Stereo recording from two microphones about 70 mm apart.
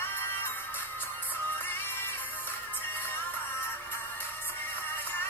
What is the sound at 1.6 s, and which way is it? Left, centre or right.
Music, left.